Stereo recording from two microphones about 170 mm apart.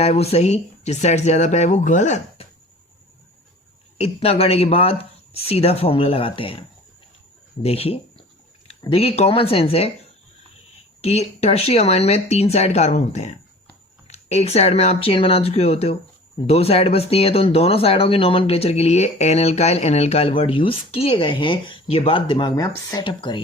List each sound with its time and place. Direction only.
0.0 s speech: 35° left (ahead or behind)
3.9 s speech: 35° left (ahead or behind)
11.0 s speech: 40° left (ahead or behind)